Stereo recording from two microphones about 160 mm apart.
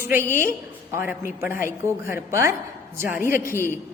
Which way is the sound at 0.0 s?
15° right (ahead or behind).